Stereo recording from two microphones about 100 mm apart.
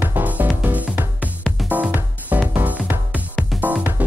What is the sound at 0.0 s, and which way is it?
Music, 20° right (ahead or behind).